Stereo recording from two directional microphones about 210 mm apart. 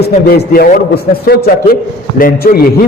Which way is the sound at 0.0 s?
40° left (ahead or behind).